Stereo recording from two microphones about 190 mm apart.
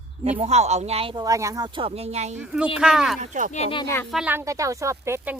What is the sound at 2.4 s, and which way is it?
Speech, 5° right (ahead or behind).